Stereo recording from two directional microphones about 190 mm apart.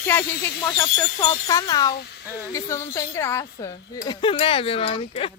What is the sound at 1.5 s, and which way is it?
Speech, 20° left (ahead or behind).